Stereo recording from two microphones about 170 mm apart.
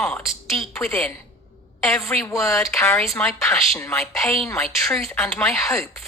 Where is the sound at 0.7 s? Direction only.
15° left (ahead or behind).